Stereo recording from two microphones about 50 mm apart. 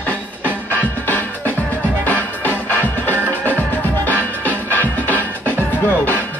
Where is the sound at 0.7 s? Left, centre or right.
Left.